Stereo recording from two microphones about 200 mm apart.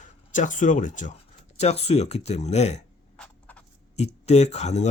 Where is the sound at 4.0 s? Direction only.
35° left (ahead or behind).